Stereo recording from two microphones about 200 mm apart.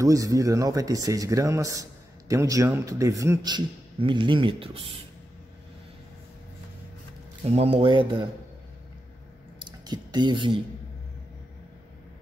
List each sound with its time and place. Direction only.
0.0 s speech: 15° right (ahead or behind)
7.4 s speech: 30° right (ahead or behind)
9.6 s a sound: 20° right (ahead or behind)